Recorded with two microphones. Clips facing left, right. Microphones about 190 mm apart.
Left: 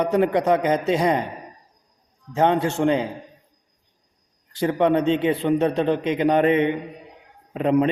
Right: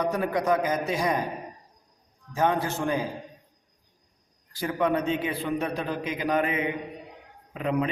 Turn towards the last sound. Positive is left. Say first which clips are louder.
# left 8 dB
turn(degrees=35)  # may be behind; listen again after turning